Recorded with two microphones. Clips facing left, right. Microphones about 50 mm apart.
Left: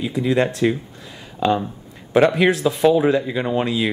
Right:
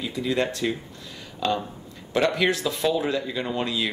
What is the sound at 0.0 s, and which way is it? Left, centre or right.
Speech, left.